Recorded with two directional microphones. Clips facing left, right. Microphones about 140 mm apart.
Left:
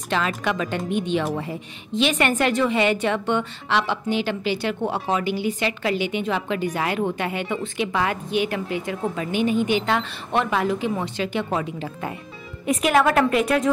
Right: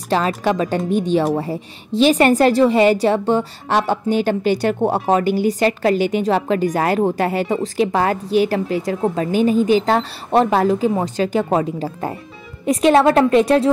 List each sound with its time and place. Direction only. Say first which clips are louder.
0.1 s a woman's voice: right 6 dB; 35° right (ahead or behind)